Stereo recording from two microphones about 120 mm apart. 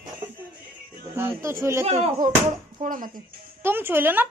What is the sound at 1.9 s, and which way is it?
Speech, 70° right (ahead or behind).